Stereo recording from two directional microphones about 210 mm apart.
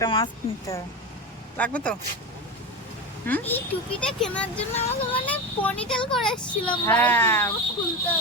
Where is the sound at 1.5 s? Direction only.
5° left (ahead or behind).